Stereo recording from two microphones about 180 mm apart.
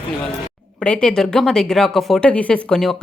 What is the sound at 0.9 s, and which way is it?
Speech, 5° left (ahead or behind).